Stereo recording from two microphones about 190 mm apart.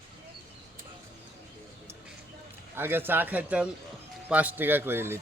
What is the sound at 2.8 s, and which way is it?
Speech, 10° right (ahead or behind).